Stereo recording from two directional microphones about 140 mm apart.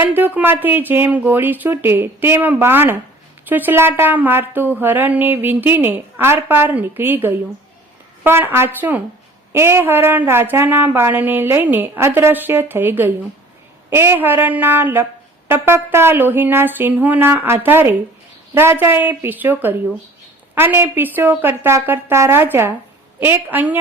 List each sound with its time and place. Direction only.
0.0 s speech: 15° right (ahead or behind)